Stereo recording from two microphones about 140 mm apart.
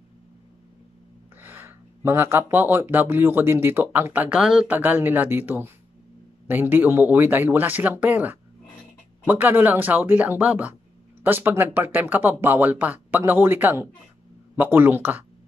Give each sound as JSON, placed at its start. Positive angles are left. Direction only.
{"t": 1.4, "sound": "speech", "side_deg": -15}